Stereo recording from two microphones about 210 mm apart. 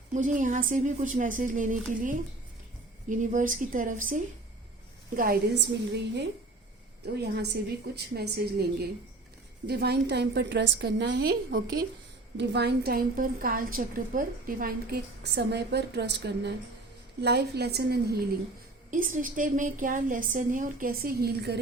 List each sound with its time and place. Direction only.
0.1 s a woman's voice: 35° right (ahead or behind)
18.9 s a woman's voice: 40° right (ahead or behind)